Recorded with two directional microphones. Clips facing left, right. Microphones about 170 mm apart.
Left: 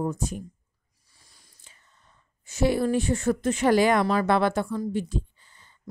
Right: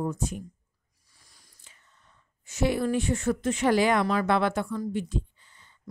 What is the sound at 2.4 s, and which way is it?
A woman's voice, 35° left (ahead or behind).